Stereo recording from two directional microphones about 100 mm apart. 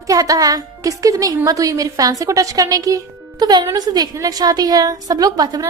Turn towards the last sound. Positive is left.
turn(degrees=-40)  # may be behind; listen again after turning